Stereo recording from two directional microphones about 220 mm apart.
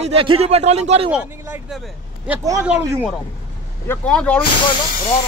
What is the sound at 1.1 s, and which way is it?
Speech, 5° right (ahead or behind).